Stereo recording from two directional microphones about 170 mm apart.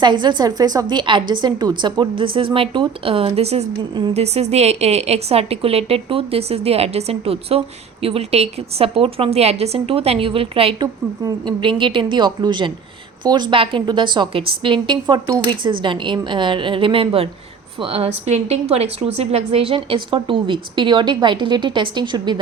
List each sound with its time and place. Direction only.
0.0 s a woman's voice: 25° right (ahead or behind)